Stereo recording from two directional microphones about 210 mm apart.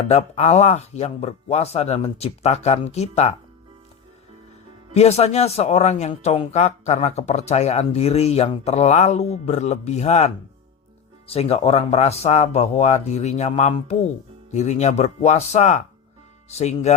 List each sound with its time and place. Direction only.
0.1 s speech: 30° left (ahead or behind)
4.9 s speech: 30° left (ahead or behind)